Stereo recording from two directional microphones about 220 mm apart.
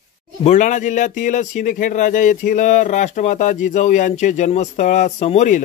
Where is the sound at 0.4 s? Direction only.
35° left (ahead or behind).